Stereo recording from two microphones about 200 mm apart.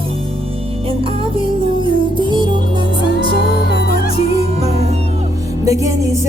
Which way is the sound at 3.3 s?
55° left (ahead or behind).